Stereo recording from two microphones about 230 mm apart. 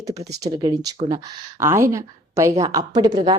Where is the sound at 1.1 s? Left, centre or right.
Centre.